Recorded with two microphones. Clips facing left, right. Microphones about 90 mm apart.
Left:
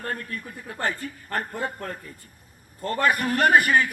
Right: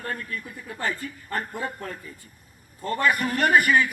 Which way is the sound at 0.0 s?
40° left (ahead or behind).